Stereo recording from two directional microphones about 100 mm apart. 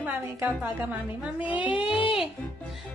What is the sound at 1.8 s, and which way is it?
Speech, 60° left (ahead or behind).